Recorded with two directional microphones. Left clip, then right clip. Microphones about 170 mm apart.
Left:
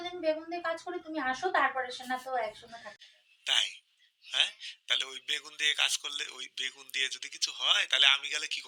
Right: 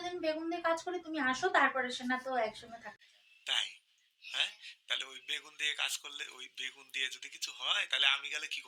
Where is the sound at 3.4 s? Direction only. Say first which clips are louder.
Left 6 dB; 35° left (ahead or behind).